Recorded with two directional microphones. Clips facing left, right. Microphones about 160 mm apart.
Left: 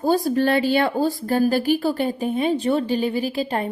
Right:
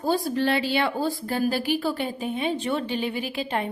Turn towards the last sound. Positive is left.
turn(degrees=40)  # may be behind; listen again after turning